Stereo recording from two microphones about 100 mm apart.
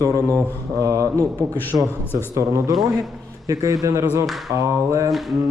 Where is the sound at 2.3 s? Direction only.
35° right (ahead or behind).